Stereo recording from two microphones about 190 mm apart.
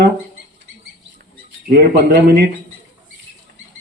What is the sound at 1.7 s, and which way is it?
Speech, 60° right (ahead or behind).